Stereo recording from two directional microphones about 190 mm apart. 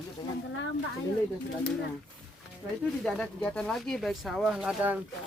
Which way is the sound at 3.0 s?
5° left (ahead or behind).